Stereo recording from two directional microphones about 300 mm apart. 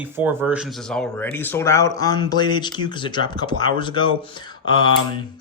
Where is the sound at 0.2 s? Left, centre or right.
Centre.